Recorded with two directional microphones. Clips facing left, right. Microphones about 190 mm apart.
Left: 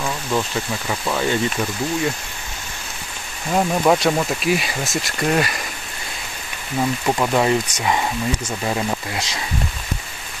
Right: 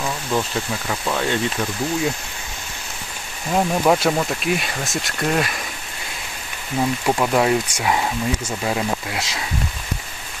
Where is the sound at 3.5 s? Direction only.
Centre (ahead or behind).